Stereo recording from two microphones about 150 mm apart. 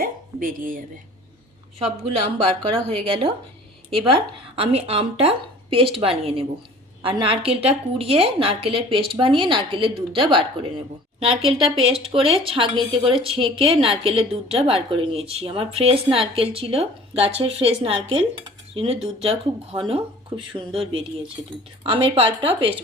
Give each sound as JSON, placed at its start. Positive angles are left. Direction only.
{"t": 0.0, "sound": "speech", "side_deg": -65}
{"t": 2.0, "sound": "a woman's voice", "side_deg": -40}
{"t": 2.7, "sound": "a woman's voice", "side_deg": 5}
{"t": 3.0, "sound": "a woman's voice", "side_deg": -40}